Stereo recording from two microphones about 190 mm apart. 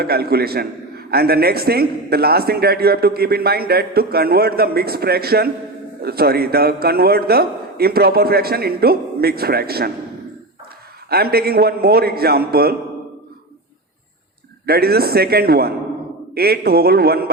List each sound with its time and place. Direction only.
0.0 s a man's voice: 55° right (ahead or behind)
11.1 s a man's voice: 55° right (ahead or behind)
14.7 s a man's voice: 55° right (ahead or behind)